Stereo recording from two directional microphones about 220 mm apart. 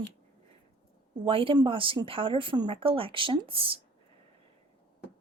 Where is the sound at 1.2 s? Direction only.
25° right (ahead or behind).